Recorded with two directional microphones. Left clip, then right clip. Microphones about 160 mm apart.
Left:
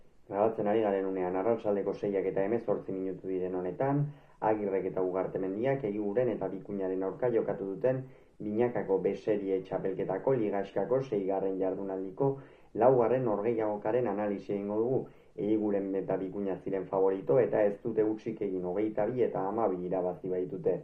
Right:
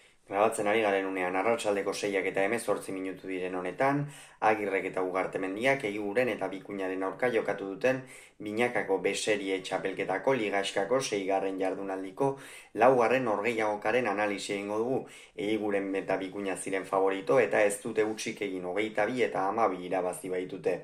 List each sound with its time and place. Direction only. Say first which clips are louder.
0.3 s speech: right 2 dB; 20° right (ahead or behind)